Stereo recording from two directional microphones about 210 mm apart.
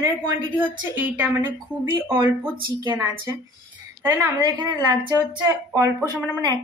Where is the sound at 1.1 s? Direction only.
10° right (ahead or behind).